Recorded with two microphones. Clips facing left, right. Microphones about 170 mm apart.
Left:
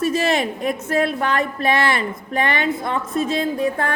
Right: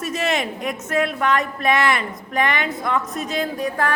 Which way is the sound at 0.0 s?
35° left (ahead or behind).